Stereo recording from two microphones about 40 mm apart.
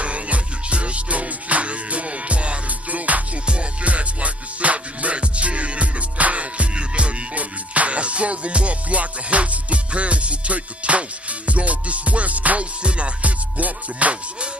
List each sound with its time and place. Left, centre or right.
0.0 s music: right